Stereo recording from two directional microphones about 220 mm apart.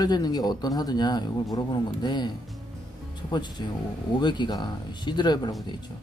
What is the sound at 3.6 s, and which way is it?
Speech, 20° left (ahead or behind).